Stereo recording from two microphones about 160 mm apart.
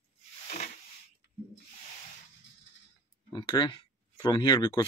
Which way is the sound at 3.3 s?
30° left (ahead or behind).